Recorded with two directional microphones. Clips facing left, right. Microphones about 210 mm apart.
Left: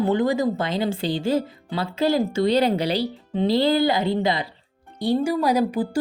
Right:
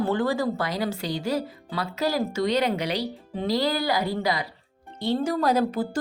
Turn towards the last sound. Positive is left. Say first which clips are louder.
# left 2 dB
turn(degrees=15)  # may be behind; listen again after turning